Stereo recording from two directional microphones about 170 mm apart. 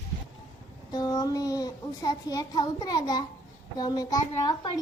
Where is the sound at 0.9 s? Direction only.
20° left (ahead or behind).